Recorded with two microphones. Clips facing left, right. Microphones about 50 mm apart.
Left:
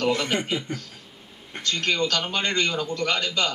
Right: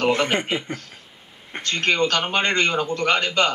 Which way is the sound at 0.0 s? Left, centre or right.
Right.